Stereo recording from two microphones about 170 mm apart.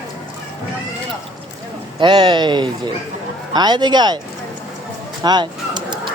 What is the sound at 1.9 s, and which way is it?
Speech, 30° right (ahead or behind).